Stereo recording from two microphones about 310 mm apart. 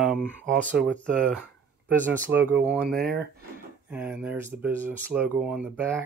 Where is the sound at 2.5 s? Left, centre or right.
Centre.